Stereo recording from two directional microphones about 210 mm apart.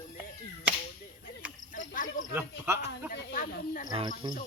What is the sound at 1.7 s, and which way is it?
Speech, 40° left (ahead or behind).